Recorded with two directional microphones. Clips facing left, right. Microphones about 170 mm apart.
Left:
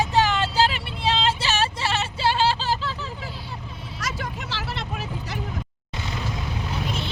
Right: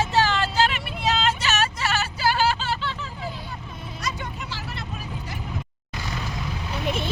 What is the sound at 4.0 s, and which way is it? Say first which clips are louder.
Vehicle: left 1 dB; 90° left.